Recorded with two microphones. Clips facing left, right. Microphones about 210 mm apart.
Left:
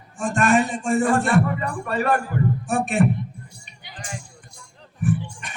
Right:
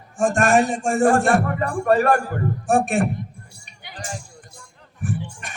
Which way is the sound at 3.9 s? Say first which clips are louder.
Right 3 dB; 40° right (ahead or behind).